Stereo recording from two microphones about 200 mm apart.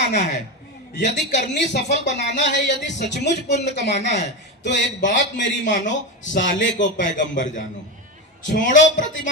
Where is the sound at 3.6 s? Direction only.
60° left (ahead or behind).